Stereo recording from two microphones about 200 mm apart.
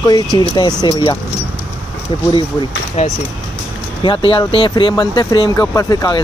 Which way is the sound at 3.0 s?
35° left (ahead or behind).